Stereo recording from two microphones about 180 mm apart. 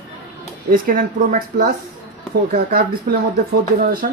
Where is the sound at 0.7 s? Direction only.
50° right (ahead or behind).